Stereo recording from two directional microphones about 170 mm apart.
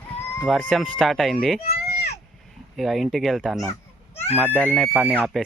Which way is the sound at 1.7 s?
75° left (ahead or behind).